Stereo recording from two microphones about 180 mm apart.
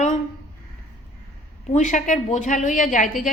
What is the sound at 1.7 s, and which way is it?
A woman's voice, 40° left (ahead or behind).